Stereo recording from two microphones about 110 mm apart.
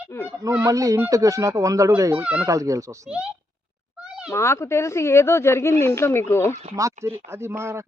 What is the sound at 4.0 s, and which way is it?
Meow, 10° right (ahead or behind).